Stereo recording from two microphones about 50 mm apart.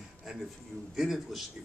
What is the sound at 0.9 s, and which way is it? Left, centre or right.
Speech, centre.